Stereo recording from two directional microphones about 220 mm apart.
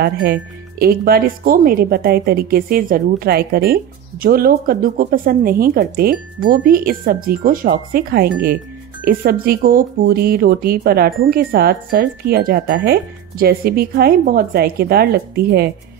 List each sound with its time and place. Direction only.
0.0 s speech: 45° right (ahead or behind)